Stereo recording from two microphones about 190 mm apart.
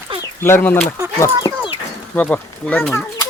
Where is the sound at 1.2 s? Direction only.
20° left (ahead or behind).